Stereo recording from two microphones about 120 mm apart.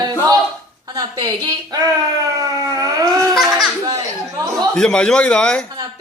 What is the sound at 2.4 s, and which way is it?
Dog, 30° right (ahead or behind).